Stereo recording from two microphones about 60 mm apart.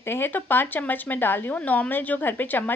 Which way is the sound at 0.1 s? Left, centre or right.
Left.